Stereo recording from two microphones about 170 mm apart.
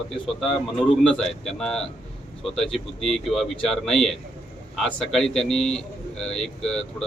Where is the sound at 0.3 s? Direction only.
Centre (ahead or behind).